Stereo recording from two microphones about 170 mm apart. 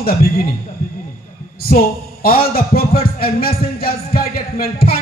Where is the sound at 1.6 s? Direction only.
60° left (ahead or behind).